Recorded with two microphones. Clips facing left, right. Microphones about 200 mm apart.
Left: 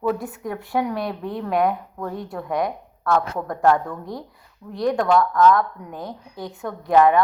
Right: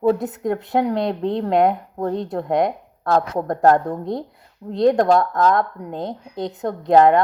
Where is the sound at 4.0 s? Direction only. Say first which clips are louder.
Right 7 dB; 20° right (ahead or behind).